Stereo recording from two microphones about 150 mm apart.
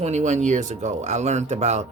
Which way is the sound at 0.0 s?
50° right (ahead or behind).